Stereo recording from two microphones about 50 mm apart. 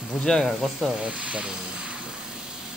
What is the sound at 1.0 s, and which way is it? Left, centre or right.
Speech, centre.